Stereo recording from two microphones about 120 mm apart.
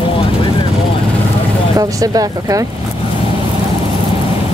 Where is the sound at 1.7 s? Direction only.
30° right (ahead or behind).